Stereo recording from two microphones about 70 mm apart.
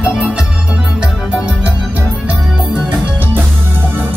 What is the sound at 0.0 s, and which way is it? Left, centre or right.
Music, centre.